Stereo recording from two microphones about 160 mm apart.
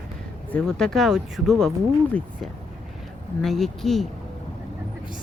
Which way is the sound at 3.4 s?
Centre (ahead or behind).